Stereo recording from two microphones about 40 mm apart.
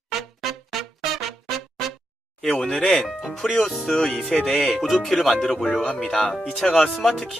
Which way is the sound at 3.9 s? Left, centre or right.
Centre.